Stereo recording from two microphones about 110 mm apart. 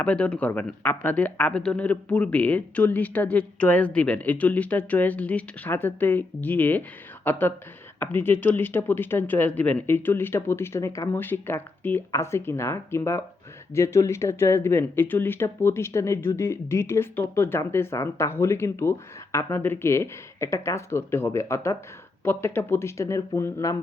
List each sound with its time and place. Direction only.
0.0 s speech: 10° left (ahead or behind); by 23.7 s 25° left (ahead or behind)